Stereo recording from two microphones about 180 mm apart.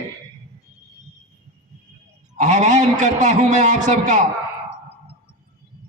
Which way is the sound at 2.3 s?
40° right (ahead or behind).